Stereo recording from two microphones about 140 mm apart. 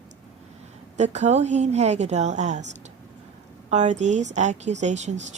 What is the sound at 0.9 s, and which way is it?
Speech, 55° right (ahead or behind).